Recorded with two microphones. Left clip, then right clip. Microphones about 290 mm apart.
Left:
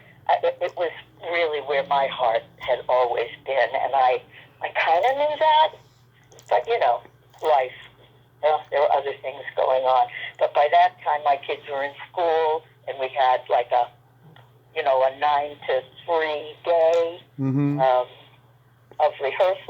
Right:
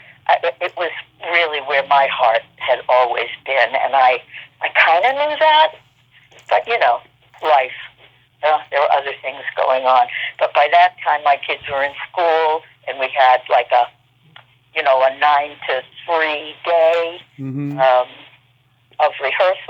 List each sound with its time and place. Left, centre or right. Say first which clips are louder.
0.3 s speech: right 5 dB; centre
17.4 s speech: left 3 dB; centre
17.7 s speech: right 8 dB; centre